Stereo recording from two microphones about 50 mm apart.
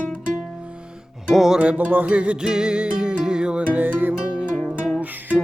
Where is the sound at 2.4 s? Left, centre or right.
Centre.